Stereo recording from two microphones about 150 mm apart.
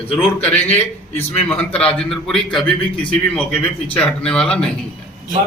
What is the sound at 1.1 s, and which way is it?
A man's voice, 15° left (ahead or behind).